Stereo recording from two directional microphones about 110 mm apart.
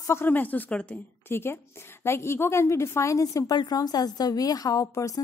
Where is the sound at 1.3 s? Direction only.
20° left (ahead or behind).